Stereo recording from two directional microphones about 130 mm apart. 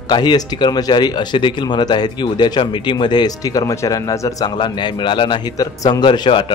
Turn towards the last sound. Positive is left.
turn(degrees=40)  # may be behind; listen again after turning